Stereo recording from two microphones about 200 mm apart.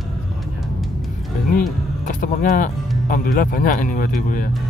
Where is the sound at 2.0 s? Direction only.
40° left (ahead or behind).